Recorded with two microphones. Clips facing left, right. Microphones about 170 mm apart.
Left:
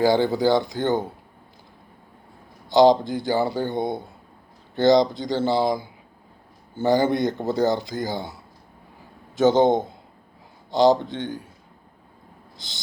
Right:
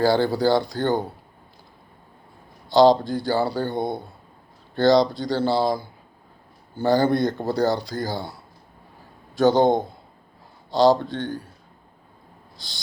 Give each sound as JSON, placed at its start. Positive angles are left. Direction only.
{"t": 0.0, "sound": "speech", "side_deg": 20}
{"t": 2.6, "sound": "speech", "side_deg": 20}
{"t": 12.5, "sound": "a sound", "side_deg": 20}